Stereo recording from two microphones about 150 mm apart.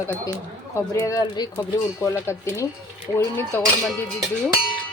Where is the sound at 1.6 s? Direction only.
20° left (ahead or behind).